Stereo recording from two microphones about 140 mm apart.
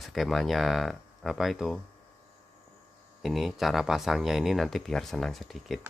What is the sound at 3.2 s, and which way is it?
Speech, centre (ahead or behind).